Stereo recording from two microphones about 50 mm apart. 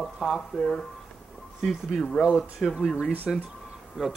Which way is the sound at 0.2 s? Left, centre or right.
Centre.